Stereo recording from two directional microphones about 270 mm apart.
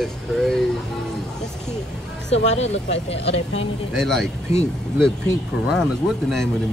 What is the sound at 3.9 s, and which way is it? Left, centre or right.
Speech, centre.